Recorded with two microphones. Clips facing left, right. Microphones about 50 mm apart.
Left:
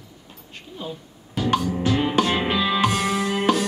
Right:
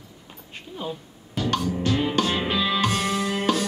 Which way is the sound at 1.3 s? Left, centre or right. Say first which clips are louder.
Left 3 dB; centre.